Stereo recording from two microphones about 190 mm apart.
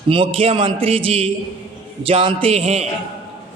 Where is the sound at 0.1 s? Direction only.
25° right (ahead or behind).